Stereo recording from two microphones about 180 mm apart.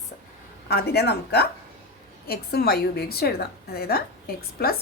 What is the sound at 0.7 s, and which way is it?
A woman's voice, 60° left (ahead or behind).